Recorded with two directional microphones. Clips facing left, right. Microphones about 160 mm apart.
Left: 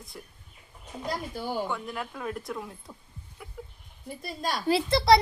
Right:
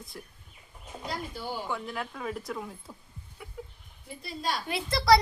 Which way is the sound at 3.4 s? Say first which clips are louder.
Even; centre (ahead or behind).